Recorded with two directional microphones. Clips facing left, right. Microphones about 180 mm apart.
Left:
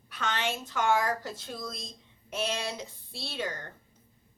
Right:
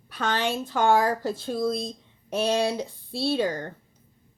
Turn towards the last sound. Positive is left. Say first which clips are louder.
# right 11 dB
turn(degrees=-35)  # may be behind; listen again after turning